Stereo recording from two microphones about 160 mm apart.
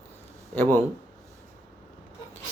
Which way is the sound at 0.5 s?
10° left (ahead or behind).